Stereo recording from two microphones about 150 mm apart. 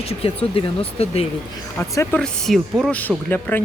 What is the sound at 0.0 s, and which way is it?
Speech, 40° left (ahead or behind).